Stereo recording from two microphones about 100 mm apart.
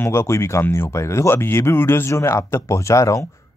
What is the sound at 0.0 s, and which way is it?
Speech, 25° left (ahead or behind).